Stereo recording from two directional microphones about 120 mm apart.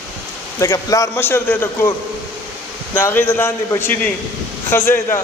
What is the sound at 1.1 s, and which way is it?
Speech, 15° left (ahead or behind).